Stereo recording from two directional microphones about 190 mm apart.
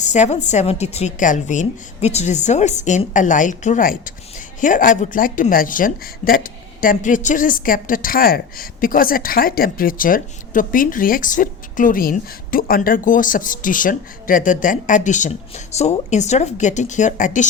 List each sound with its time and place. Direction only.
0.0 s a woman's voice: 40° left (ahead or behind)